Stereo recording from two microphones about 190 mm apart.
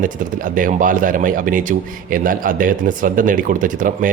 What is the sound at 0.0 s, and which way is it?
Speech, 45° right (ahead or behind).